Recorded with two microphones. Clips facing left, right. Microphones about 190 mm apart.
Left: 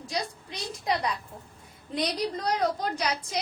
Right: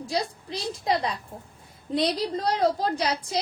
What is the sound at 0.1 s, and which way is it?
A woman's voice, 30° right (ahead or behind).